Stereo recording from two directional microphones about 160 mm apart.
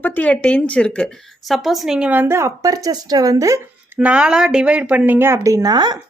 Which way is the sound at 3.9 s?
5° right (ahead or behind).